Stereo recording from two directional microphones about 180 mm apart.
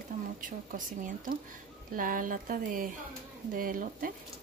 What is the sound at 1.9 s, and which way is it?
Speech, 50° right (ahead or behind).